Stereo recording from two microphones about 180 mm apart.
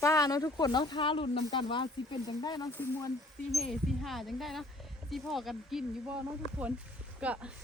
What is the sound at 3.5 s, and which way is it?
Speech, centre (ahead or behind).